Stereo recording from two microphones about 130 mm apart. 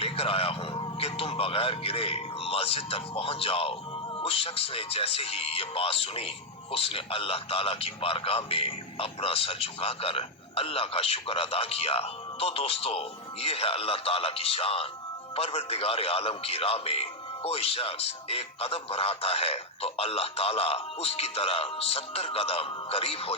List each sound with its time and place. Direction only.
0.0 s a man's voice: 45° left (ahead or behind)